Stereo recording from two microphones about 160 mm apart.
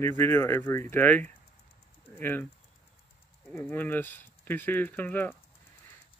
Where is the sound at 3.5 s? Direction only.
10° left (ahead or behind).